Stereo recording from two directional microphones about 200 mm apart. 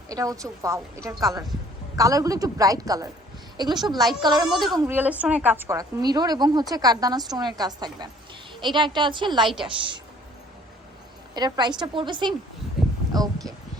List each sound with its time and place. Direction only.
0.1 s a woman's voice: 15° right (ahead or behind)
4.4 s speech: centre (ahead or behind)
4.7 s a woman's voice: 15° right (ahead or behind)
11.3 s a woman's voice: 20° right (ahead or behind)